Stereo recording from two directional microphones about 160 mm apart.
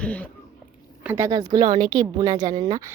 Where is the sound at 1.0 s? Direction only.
15° right (ahead or behind).